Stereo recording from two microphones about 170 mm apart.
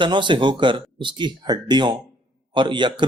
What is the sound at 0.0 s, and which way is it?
Speech, 30° right (ahead or behind).